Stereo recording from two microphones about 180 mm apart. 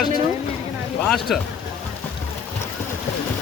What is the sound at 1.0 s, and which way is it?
Speech, centre (ahead or behind).